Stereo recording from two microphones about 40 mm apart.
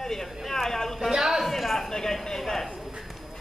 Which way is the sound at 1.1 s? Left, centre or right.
Centre.